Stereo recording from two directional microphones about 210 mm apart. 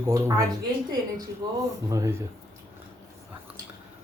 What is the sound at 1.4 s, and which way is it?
Speech, 15° right (ahead or behind).